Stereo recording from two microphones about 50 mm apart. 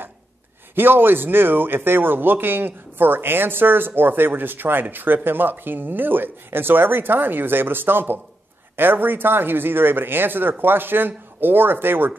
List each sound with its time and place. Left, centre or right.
0.7 s speech: right